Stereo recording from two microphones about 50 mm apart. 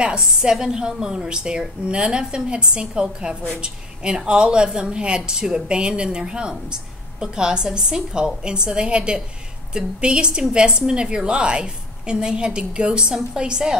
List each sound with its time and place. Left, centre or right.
0.0 s a woman's voice: centre